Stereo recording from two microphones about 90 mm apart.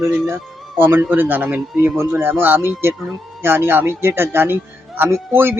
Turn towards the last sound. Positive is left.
turn(degrees=-25)  # may be behind; listen again after turning